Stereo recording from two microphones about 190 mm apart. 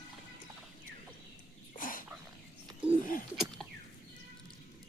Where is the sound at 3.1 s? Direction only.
45° left (ahead or behind).